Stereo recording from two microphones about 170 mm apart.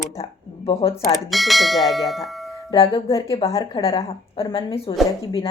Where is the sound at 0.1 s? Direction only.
35° left (ahead or behind).